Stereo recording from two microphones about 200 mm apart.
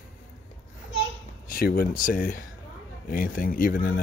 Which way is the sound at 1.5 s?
45° left (ahead or behind).